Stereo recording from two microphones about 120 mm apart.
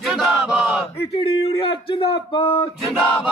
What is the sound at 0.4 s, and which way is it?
Battle cry, 5° right (ahead or behind).